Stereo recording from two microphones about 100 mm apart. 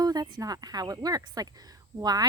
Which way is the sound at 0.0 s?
40° right (ahead or behind).